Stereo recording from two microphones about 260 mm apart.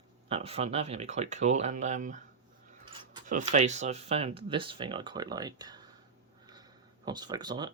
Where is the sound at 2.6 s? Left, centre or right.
Centre.